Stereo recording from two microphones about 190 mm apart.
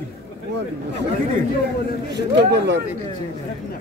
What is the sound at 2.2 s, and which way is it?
Speech, 65° right (ahead or behind).